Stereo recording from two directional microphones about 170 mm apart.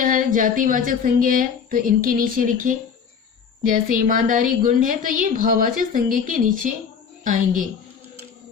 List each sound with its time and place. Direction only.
0.0 s a woman's voice: 50° right (ahead or behind)